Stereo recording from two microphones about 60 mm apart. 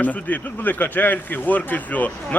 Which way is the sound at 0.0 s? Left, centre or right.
Left.